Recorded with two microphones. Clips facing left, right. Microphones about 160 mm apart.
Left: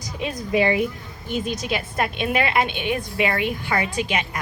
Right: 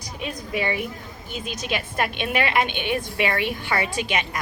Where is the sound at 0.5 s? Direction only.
30° left (ahead or behind).